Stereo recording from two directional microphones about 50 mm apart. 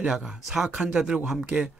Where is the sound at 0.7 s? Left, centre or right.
Centre.